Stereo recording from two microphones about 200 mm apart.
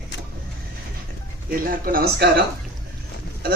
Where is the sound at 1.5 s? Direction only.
45° right (ahead or behind).